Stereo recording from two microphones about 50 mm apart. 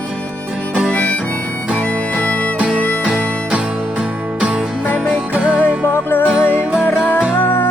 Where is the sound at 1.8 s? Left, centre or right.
Left.